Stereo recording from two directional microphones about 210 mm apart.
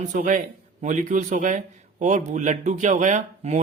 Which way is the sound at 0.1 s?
40° right (ahead or behind).